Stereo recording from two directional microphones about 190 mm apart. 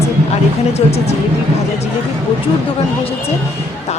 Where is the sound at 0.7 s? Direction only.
35° left (ahead or behind).